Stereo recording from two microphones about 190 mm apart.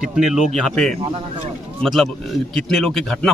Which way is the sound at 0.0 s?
5° right (ahead or behind).